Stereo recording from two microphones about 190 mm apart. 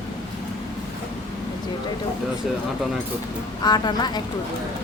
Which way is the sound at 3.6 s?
20° left (ahead or behind).